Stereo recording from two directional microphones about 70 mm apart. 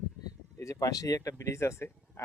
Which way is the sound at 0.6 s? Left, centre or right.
Left.